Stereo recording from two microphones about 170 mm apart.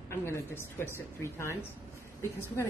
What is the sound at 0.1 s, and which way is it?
A woman's voice, 15° left (ahead or behind).